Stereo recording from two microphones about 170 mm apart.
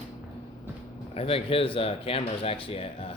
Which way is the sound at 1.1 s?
35° left (ahead or behind).